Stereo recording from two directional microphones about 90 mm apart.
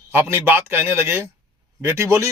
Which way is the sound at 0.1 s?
25° right (ahead or behind).